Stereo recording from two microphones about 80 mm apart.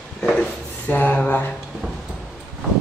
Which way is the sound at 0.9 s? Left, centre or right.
Left.